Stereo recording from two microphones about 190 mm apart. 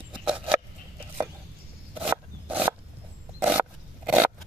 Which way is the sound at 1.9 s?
10° right (ahead or behind).